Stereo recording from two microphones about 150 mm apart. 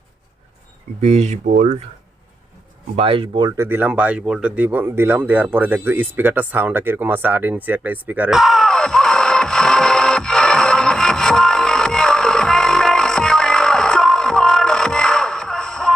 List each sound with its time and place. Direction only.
1.0 s speech: 50° right (ahead or behind)
2.9 s speech: 40° right (ahead or behind)
3.6 s a sound: 15° right (ahead or behind); by 15.9 s 5° left (ahead or behind)